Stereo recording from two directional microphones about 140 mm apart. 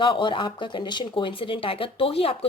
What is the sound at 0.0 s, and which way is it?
Speech, 35° left (ahead or behind).